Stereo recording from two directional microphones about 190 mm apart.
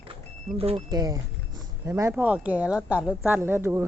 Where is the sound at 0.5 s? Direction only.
30° right (ahead or behind).